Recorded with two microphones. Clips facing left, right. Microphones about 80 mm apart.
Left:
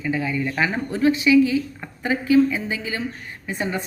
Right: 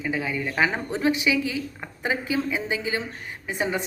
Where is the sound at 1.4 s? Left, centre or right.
Left.